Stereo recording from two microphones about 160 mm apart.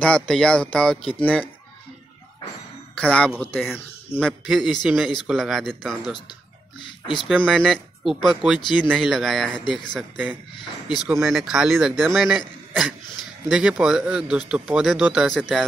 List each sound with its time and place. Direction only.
0.0 s a man's voice: 5° left (ahead or behind)
3.0 s a man's voice: 5° left (ahead or behind)
6.8 s a sound: 30° left (ahead or behind)
7.4 s a man's voice: 5° left (ahead or behind)
9.9 s a man's voice: 10° right (ahead or behind)